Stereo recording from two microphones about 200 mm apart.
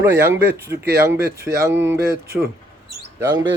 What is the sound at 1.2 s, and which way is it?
Speech, 50° right (ahead or behind).